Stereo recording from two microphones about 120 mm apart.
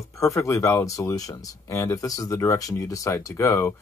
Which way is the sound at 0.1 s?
25° left (ahead or behind).